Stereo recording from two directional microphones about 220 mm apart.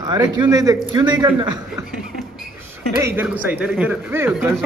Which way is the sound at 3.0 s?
10° right (ahead or behind).